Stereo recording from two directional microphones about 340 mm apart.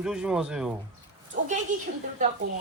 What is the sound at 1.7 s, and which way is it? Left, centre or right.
Speech, right.